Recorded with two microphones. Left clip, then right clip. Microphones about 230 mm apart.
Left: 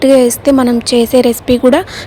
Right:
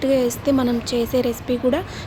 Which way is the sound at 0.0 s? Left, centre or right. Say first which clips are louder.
Left 11 dB; left.